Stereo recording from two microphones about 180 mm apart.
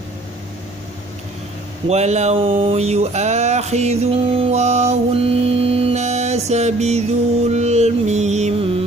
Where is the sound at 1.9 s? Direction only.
40° right (ahead or behind).